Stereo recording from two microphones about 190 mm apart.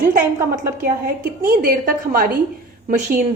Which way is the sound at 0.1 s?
45° right (ahead or behind).